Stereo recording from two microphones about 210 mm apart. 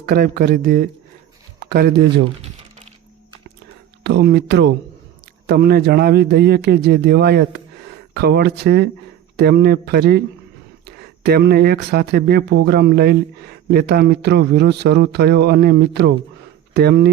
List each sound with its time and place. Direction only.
0.0 s speech: 45° right (ahead or behind)
1.5 s a sound: 45° right (ahead or behind)
4.0 s speech: 55° right (ahead or behind)